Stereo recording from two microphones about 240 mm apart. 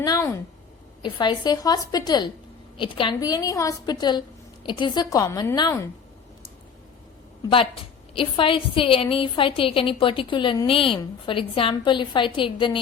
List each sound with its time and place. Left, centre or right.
0.0 s a sound: centre
1.0 s a woman's voice: centre
8.1 s a woman's voice: left